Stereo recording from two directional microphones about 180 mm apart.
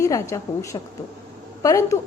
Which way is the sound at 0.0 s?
15° left (ahead or behind).